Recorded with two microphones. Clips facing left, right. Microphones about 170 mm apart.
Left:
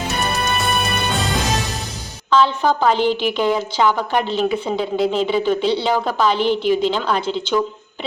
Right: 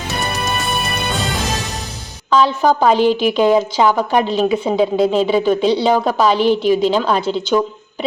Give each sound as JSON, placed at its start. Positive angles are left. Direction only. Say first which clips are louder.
{"t": 0.3, "sound": "music", "louder": "even", "side_deg": 0}
{"t": 2.3, "sound": "a woman's voice", "louder": "right 2 dB", "side_deg": -15}